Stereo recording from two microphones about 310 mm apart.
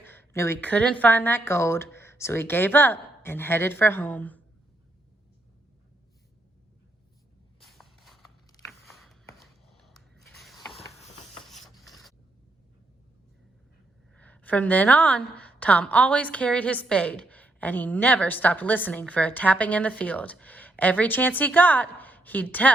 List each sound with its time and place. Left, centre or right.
0.0 s speech: centre
7.6 s walk: centre
8.8 s a sound: centre
11.0 s a sound: left
11.4 s printer: centre
14.2 s a woman's voice: centre